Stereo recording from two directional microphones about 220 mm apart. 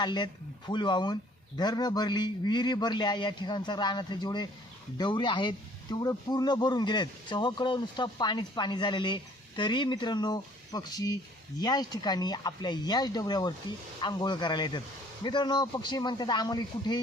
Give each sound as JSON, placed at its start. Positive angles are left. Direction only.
{"t": 0.0, "sound": "speech", "side_deg": 20}